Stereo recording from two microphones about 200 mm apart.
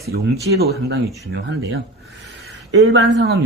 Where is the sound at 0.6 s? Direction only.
55° right (ahead or behind).